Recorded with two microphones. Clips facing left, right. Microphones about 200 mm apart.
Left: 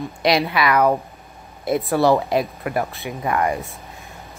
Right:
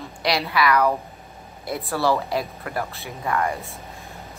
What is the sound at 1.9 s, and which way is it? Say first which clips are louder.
A woman's voice: left 4 dB; 20° left (ahead or behind).